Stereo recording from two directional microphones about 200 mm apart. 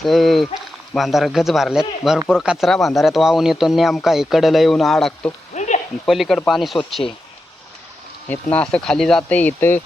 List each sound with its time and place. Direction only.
0.0 s speech: centre (ahead or behind)
5.5 s sizzle: 35° left (ahead or behind)
6.1 s speech: centre (ahead or behind)
8.3 s speech: 5° left (ahead or behind)